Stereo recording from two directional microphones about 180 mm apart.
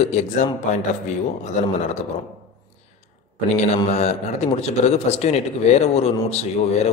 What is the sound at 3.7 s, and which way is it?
A man's voice, 40° left (ahead or behind).